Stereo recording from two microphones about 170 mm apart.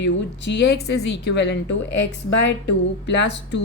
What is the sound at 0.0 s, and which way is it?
Speech, 90° left.